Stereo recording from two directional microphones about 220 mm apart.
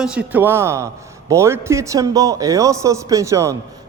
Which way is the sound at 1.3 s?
10° right (ahead or behind).